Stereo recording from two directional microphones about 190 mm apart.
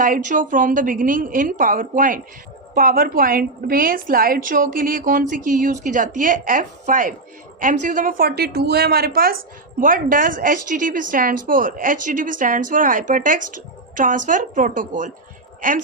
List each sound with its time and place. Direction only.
0.0 s a woman's voice: 45° right (ahead or behind)